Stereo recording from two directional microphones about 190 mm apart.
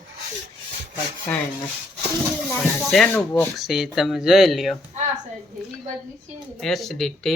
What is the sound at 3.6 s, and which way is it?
Speech, centre (ahead or behind).